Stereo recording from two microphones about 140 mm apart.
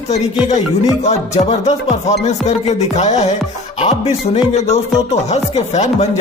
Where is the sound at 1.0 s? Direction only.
55° left (ahead or behind).